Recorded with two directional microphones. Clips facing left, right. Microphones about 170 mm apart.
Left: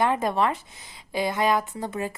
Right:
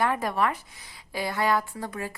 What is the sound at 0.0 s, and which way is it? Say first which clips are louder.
A woman's voice: left 3 dB; 20° left (ahead or behind).